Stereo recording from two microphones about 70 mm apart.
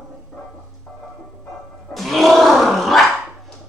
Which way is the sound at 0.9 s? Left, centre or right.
Centre.